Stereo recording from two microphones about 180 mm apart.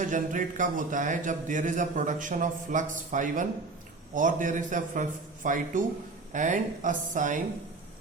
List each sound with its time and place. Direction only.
0.0 s a man's voice: 45° right (ahead or behind)